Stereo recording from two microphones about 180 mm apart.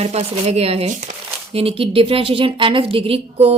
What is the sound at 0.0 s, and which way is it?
Speech, 35° right (ahead or behind).